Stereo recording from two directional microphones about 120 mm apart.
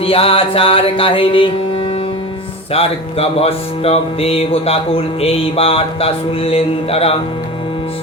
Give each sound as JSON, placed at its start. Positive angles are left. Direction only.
{"t": 0.0, "sound": "music", "side_deg": 50}
{"t": 2.7, "sound": "speech", "side_deg": 55}